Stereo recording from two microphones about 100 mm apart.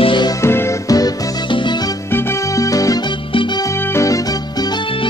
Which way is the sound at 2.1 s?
35° left (ahead or behind).